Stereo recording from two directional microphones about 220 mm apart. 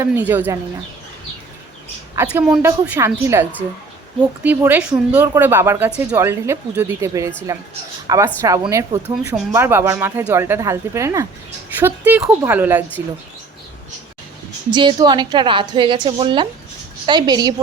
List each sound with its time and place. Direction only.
0.0 s speech: 10° right (ahead or behind)
2.1 s a woman's voice: 5° right (ahead or behind)
9.0 s speech: 5° right (ahead or behind)
14.7 s a woman's voice: 20° right (ahead or behind)